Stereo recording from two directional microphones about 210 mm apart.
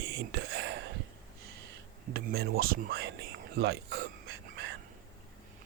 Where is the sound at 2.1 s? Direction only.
50° right (ahead or behind).